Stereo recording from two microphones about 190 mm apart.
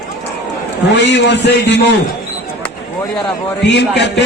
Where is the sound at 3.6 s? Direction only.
65° left (ahead or behind).